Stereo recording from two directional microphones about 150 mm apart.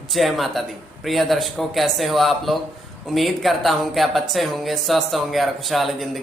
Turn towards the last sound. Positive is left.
turn(degrees=0)  # may be behind; listen again after turning